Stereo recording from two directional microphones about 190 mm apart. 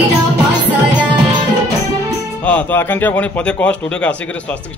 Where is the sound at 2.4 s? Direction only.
10° left (ahead or behind).